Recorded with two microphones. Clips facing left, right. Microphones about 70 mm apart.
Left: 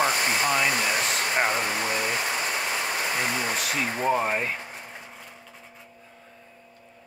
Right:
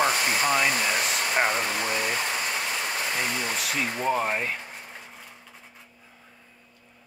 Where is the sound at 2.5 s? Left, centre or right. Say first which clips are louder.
Left 1 dB; centre.